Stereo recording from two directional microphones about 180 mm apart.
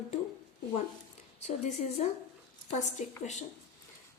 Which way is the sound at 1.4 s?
35° left (ahead or behind).